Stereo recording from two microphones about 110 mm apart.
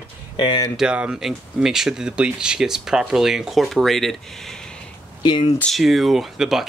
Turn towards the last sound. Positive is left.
turn(degrees=-5)  # may be behind; listen again after turning